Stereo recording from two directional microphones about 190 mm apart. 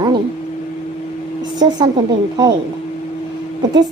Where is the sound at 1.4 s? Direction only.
20° right (ahead or behind).